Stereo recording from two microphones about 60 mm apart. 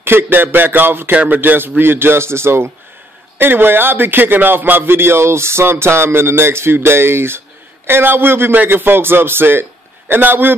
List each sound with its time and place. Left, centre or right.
0.0 s a man's voice: right